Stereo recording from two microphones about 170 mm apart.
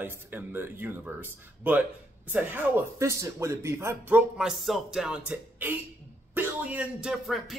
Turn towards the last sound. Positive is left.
turn(degrees=0)  # may be behind; listen again after turning